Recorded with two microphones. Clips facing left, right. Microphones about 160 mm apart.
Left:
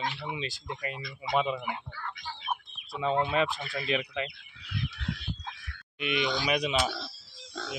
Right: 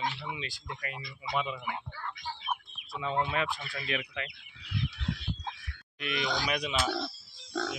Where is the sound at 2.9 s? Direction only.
30° left (ahead or behind).